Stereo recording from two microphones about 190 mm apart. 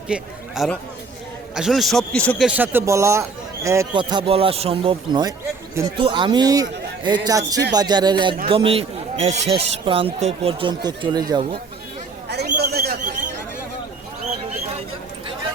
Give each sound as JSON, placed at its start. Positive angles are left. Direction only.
{"t": 0.1, "sound": "a man's voice", "side_deg": 0}
{"t": 2.5, "sound": "a man's voice", "side_deg": -10}
{"t": 12.5, "sound": "a sound", "side_deg": -55}